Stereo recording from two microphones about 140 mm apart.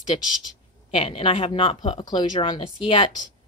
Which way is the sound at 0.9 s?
40° left (ahead or behind).